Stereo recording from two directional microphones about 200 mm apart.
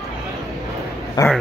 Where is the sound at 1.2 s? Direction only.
20° left (ahead or behind).